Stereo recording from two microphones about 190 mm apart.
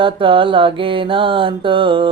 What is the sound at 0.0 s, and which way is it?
Speech, 25° right (ahead or behind).